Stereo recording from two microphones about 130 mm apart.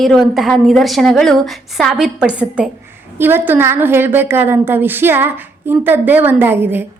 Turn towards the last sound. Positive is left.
turn(degrees=-15)  # may be behind; listen again after turning